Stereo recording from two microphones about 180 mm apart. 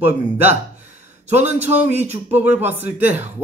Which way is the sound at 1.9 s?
40° right (ahead or behind).